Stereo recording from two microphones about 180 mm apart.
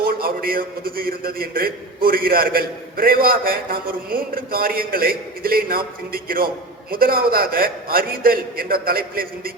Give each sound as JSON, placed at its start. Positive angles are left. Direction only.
{"t": 0.0, "sound": "a man's voice", "side_deg": -55}